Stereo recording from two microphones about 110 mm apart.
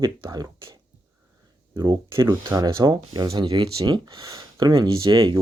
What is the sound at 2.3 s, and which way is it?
Speech, 25° right (ahead or behind).